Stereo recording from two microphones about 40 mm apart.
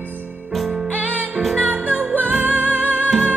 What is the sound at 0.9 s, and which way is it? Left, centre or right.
Music, right.